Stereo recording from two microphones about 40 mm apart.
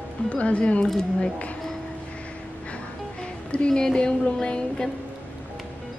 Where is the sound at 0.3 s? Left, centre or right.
Left.